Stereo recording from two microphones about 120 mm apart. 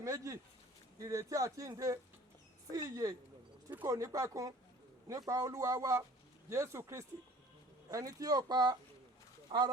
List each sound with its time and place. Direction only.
0.0 s speech: 25° right (ahead or behind)
9.5 s speech: 45° right (ahead or behind)